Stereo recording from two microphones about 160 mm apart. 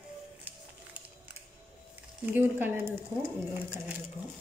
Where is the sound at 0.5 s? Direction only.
10° right (ahead or behind).